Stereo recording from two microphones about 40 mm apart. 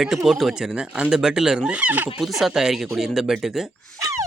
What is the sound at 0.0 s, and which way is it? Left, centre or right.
Speech, centre.